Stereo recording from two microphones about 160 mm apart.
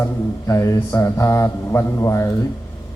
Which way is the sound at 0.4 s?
20° left (ahead or behind).